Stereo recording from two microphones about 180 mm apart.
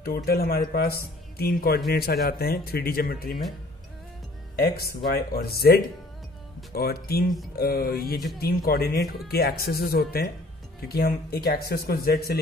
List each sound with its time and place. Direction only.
0.0 s speech: 60° left (ahead or behind)
4.6 s speech: 55° left (ahead or behind)